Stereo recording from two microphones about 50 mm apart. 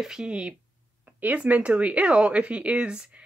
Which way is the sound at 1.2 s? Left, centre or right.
Right.